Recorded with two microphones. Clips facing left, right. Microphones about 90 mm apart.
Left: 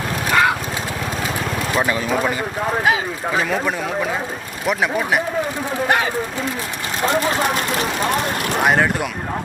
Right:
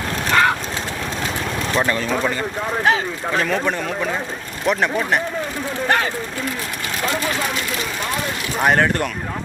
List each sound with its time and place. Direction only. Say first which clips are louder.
0.3 s vehicle: even; 5° left (ahead or behind)
1.7 s speech: even; 10° left (ahead or behind)
7.0 s speech: left 5 dB; 35° left (ahead or behind)
8.6 s speech: right 1 dB; 5° left (ahead or behind)